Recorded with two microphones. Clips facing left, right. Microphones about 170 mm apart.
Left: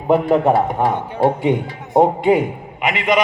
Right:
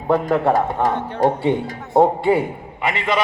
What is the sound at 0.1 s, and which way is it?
A man's voice, 15° left (ahead or behind).